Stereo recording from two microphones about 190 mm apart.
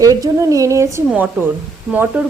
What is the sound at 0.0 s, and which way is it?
A woman's voice, 20° right (ahead or behind).